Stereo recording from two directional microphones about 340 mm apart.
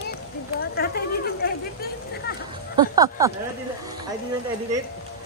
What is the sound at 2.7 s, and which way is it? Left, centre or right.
Speech, centre.